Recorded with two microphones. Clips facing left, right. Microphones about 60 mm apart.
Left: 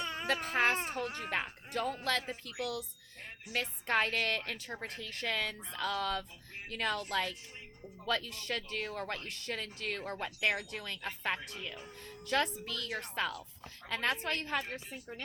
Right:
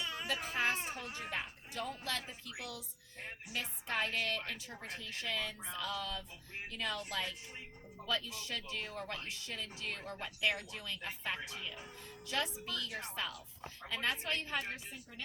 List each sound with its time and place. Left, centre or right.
0.0 s speech: left
3.5 s speech: left